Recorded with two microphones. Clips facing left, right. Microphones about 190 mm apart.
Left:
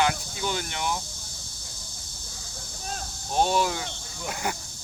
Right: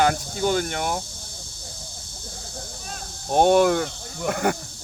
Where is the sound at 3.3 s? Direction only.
55° right (ahead or behind).